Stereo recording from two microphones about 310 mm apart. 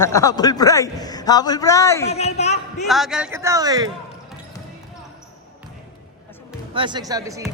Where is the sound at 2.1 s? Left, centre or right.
Left.